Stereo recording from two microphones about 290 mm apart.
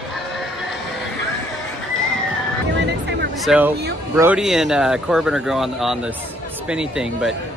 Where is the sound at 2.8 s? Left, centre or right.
Right.